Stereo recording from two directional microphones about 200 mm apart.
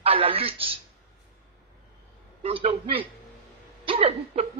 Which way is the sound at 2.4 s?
30° right (ahead or behind).